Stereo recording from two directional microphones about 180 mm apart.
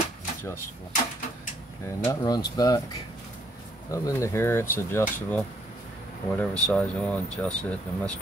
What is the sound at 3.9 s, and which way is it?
Speech, 15° left (ahead or behind).